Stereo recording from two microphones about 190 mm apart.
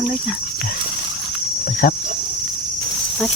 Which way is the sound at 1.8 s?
50° left (ahead or behind).